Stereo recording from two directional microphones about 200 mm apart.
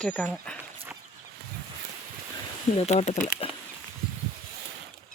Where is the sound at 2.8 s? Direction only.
30° left (ahead or behind).